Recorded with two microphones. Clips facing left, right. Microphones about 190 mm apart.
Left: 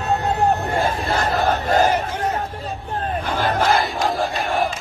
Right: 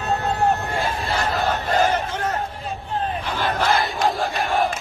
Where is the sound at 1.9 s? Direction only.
15° left (ahead or behind).